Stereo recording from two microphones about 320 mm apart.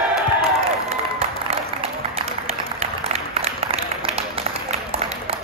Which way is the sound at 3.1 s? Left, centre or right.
Centre.